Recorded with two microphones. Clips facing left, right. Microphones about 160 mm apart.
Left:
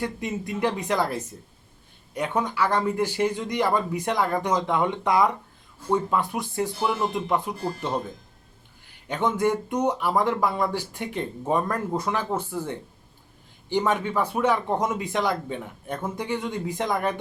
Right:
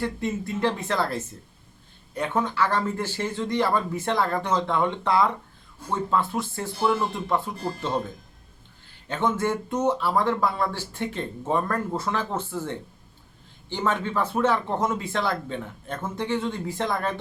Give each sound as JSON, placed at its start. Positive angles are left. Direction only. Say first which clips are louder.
{"t": 0.0, "sound": "speech", "louder": "right 1 dB", "side_deg": 15}
{"t": 9.0, "sound": "speech", "louder": "left 2 dB", "side_deg": 15}